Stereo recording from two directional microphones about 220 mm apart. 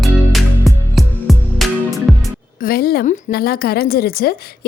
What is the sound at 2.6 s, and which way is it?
Speech, 45° left (ahead or behind).